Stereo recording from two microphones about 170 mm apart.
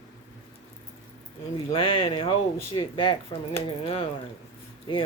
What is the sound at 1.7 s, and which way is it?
Speech, 35° left (ahead or behind).